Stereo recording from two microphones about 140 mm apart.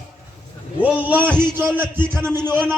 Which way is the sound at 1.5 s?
15° right (ahead or behind).